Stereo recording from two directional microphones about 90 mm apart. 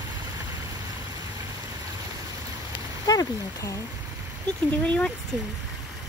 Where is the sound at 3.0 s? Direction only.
45° left (ahead or behind).